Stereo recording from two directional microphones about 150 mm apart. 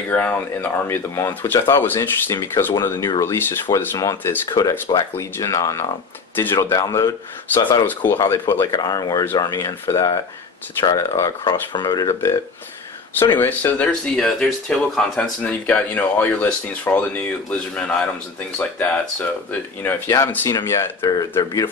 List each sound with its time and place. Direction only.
0.1 s speech: 10° left (ahead or behind)
19.8 s speech: 15° left (ahead or behind)